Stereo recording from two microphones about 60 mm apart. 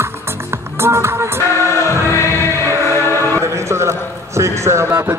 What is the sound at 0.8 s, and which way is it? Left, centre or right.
Music, right.